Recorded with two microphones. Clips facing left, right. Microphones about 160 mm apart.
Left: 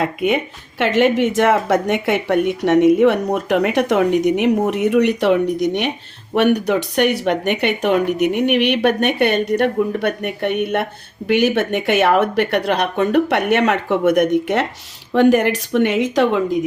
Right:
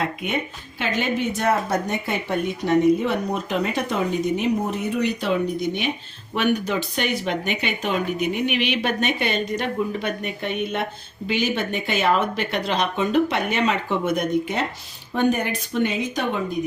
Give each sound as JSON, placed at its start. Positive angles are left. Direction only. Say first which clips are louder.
{"t": 0.8, "sound": "speech", "louder": "left 9 dB", "side_deg": 80}
{"t": 6.3, "sound": "speech", "louder": "left 7 dB", "side_deg": 70}